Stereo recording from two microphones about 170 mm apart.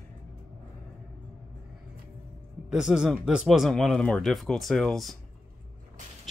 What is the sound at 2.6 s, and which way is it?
Speech, 5° right (ahead or behind).